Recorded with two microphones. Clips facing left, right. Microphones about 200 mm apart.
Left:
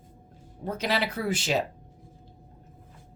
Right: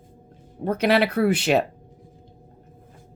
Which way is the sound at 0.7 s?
60° right (ahead or behind).